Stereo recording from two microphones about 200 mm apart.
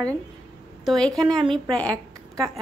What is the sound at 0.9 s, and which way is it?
Speech, centre (ahead or behind).